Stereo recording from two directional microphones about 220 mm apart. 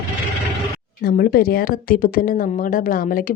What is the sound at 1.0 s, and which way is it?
Speech, 45° left (ahead or behind).